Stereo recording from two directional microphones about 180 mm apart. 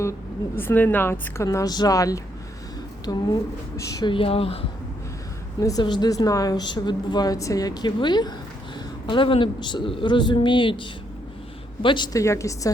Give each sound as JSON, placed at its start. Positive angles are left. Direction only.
{"t": 0.5, "sound": "a woman's voice", "side_deg": 10}
{"t": 5.5, "sound": "a woman's voice", "side_deg": 20}